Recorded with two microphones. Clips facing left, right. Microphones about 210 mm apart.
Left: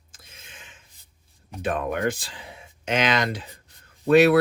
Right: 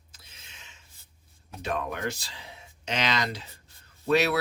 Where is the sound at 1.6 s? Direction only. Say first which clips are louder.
Left 6 dB; 50° left (ahead or behind).